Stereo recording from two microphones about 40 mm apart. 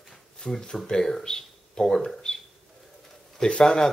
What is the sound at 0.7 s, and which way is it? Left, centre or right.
Speech, centre.